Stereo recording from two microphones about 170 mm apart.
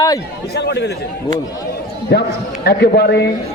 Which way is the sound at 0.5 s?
80° left.